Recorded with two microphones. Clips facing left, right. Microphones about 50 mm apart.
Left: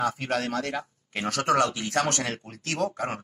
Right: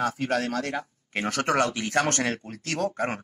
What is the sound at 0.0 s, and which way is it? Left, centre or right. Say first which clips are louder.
Speech: right 1 dB; left.